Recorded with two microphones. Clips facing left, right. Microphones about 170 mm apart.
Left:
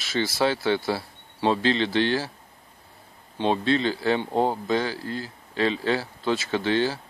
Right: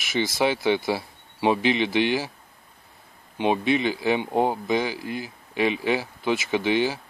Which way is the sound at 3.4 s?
15° right (ahead or behind).